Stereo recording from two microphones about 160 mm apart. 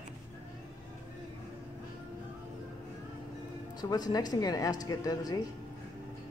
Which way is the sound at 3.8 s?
25° left (ahead or behind).